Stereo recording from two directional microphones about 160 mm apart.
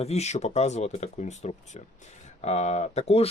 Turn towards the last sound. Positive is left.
turn(degrees=40)  # may be behind; listen again after turning